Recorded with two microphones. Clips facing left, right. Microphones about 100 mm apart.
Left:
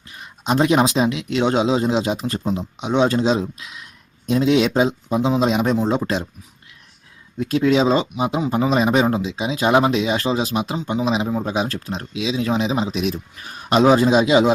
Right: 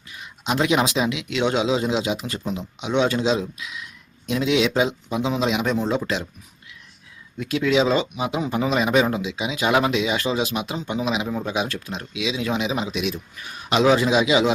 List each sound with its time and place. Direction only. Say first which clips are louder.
0.1 s speech: left 4 dB; 40° left (ahead or behind)
7.3 s speech: left 3 dB; 35° left (ahead or behind)
8.1 s speech: left 4 dB; 25° left (ahead or behind)